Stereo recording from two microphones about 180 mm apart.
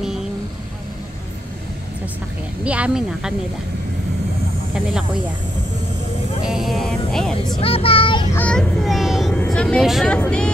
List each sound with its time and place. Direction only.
2.6 s music: 5° right (ahead or behind)
6.4 s music: centre (ahead or behind)
7.6 s a child's voice: 30° left (ahead or behind)
8.4 s a child's voice: 5° left (ahead or behind)
9.4 s music: 5° left (ahead or behind)